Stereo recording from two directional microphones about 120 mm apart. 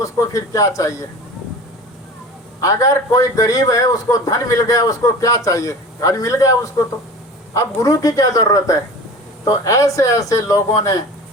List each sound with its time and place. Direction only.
0.0 s a man's voice: 25° left (ahead or behind)
2.6 s a man's voice: 30° left (ahead or behind)